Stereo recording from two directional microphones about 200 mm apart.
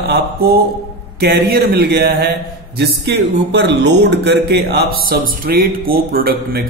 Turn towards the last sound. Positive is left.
turn(degrees=-50)  # may be behind; listen again after turning